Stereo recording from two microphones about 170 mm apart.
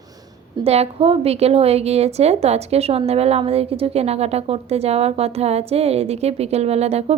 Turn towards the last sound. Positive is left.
turn(degrees=-40)  # may be behind; listen again after turning